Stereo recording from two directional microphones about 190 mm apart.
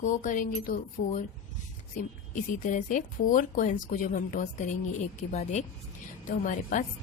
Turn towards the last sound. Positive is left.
turn(degrees=45)  # may be behind; listen again after turning